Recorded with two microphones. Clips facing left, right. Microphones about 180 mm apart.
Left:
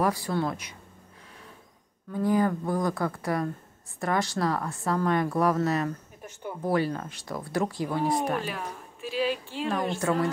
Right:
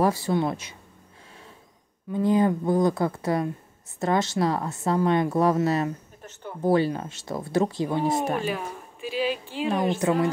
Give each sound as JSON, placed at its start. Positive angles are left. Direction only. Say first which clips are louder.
{"t": 0.0, "sound": "a woman's voice", "louder": "right 4 dB", "side_deg": -25}
{"t": 2.1, "sound": "a woman's voice", "louder": "right 3 dB", "side_deg": -20}
{"t": 8.5, "sound": "a woman's voice", "louder": "right 5 dB", "side_deg": 0}
{"t": 9.9, "sound": "a woman's voice", "louder": "right 3 dB", "side_deg": -20}